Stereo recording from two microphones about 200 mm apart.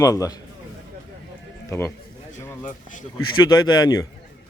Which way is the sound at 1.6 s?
10° left (ahead or behind).